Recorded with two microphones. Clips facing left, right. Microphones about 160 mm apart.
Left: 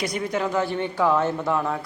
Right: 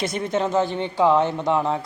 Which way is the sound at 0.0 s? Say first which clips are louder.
Right 2 dB; 25° right (ahead or behind).